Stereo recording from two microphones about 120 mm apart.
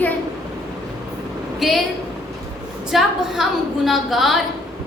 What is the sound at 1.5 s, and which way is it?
Speech, centre (ahead or behind).